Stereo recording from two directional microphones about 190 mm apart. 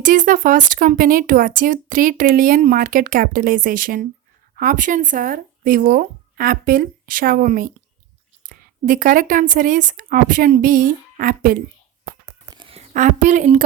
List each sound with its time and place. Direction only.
0.0 s speech: 45° right (ahead or behind)
12.2 s a sound: 30° right (ahead or behind)
12.9 s a woman's voice: 40° right (ahead or behind)